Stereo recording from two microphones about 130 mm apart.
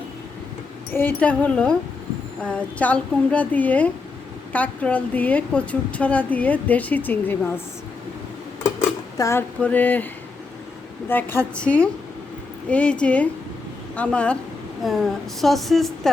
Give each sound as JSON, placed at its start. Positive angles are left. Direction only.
{"t": 0.9, "sound": "a woman's voice", "side_deg": 10}
{"t": 9.1, "sound": "speech", "side_deg": 25}
{"t": 9.6, "sound": "a woman's voice", "side_deg": 10}
{"t": 11.1, "sound": "a woman's voice", "side_deg": 15}